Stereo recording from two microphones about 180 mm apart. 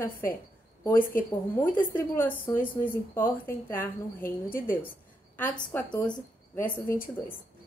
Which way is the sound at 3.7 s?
10° left (ahead or behind).